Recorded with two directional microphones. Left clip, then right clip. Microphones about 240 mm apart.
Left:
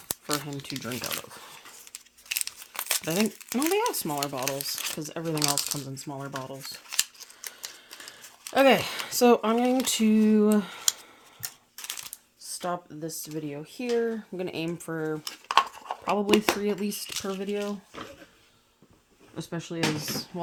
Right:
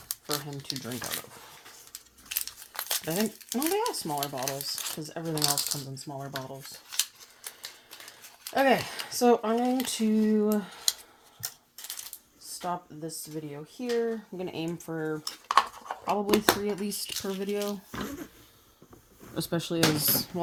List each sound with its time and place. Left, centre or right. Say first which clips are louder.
0.3 s speech: left 2 dB; left
1.9 s a sound: left 5 dB; left
2.9 s speech: left 3 dB; left
8.4 s speech: left 4 dB; left
11.3 s a sound: even; left
12.6 s speech: left 2 dB; left
15.2 s dishes: left 1 dB; left
16.8 s speech: left 1 dB; centre
19.4 s speech: right 5 dB; centre
20.3 s speech: right 1 dB; centre